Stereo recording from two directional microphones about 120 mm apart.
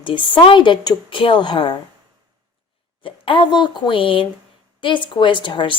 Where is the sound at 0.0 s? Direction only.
45° left (ahead or behind).